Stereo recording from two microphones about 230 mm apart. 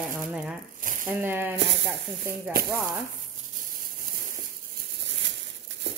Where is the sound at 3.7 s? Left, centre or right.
Right.